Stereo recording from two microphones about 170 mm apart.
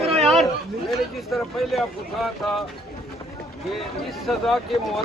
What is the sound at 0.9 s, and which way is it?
Speech, centre (ahead or behind).